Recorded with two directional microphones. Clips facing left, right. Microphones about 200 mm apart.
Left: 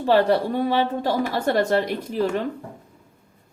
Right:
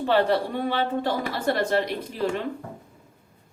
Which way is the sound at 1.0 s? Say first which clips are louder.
Left 3 dB; 40° left (ahead or behind).